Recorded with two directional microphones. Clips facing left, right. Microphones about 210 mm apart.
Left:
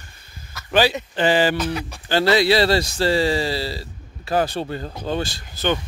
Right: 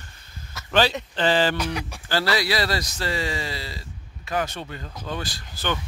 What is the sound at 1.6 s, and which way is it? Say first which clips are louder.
Speech: left 3 dB; 10° right (ahead or behind).